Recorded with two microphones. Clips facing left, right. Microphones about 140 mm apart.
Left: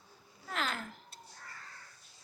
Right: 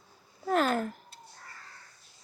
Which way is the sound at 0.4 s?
45° right (ahead or behind).